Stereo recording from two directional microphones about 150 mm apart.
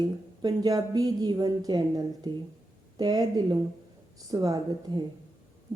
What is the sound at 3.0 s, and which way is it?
Speech, 25° right (ahead or behind).